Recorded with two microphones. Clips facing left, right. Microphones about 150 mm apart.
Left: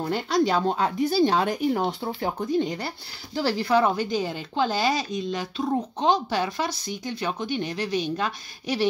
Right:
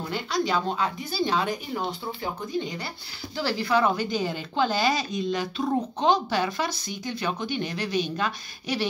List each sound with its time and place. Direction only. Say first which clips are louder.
0.0 s speech: left 5 dB; 50° left (ahead or behind)
3.3 s speech: left 2 dB; 40° left (ahead or behind)